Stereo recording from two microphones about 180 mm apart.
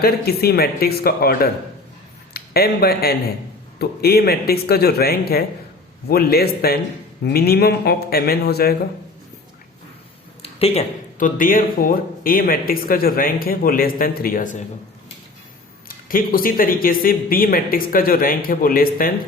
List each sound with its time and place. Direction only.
0.0 s speech: 60° left (ahead or behind)
10.4 s a sound: 35° left (ahead or behind)
11.2 s speech: 50° left (ahead or behind)
16.0 s speech: 55° left (ahead or behind)